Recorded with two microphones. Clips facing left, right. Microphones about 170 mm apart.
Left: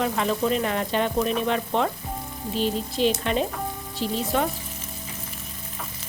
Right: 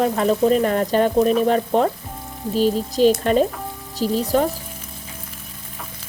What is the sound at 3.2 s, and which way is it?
Speech, 45° right (ahead or behind).